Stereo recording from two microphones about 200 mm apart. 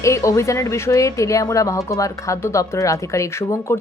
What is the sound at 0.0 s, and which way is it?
Speech, 15° left (ahead or behind).